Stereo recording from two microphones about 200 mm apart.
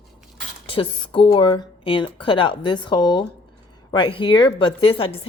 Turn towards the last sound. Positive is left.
turn(degrees=25)  # may be behind; listen again after turning